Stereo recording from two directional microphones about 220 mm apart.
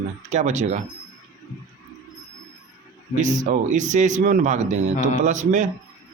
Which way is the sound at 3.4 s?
35° right (ahead or behind).